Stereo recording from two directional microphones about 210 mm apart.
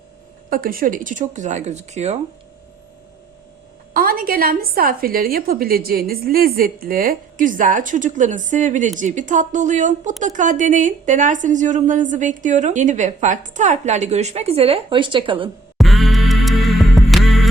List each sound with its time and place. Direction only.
0.5 s a woman's voice: 45° right (ahead or behind)
3.9 s a woman's voice: 45° right (ahead or behind); by 15.4 s 25° right (ahead or behind)
15.8 s music: centre (ahead or behind)